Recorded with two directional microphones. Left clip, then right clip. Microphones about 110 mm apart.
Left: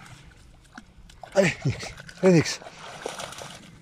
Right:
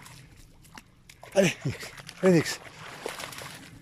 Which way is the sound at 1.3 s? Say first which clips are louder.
Left 2 dB; 20° right (ahead or behind).